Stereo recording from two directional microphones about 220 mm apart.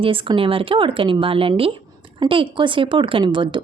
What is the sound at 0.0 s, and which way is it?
Speech, 25° right (ahead or behind).